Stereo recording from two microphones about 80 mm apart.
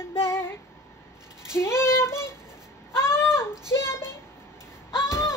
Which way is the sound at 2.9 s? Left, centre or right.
Left.